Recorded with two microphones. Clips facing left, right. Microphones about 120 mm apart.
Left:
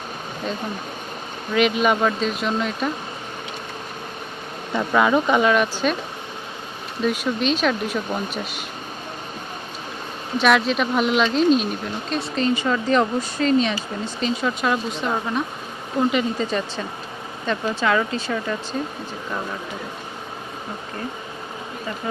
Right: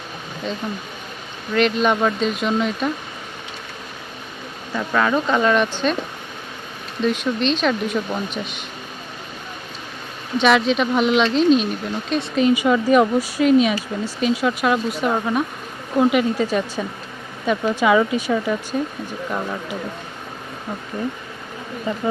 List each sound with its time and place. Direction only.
1.5 s speech: 5° left (ahead or behind)
4.7 s speech: 15° left (ahead or behind)
7.0 s speech: 5° left (ahead or behind)
10.3 s speech: centre (ahead or behind)
21.9 s speech: 20° right (ahead or behind)